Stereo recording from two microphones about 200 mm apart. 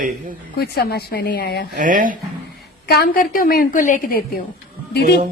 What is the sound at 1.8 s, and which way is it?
Speech, 40° right (ahead or behind).